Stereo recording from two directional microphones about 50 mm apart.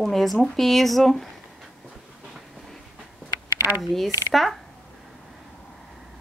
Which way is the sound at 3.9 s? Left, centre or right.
Centre.